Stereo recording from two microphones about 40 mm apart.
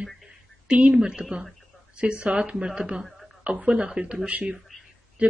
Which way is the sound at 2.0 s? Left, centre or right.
Right.